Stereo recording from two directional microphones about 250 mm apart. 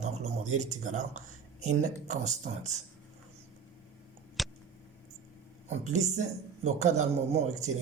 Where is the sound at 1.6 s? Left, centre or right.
Right.